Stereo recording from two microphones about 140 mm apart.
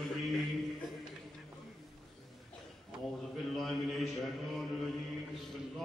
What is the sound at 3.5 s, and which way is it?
Mantra, centre (ahead or behind).